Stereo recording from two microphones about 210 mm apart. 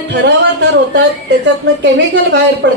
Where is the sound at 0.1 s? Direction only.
55° right (ahead or behind).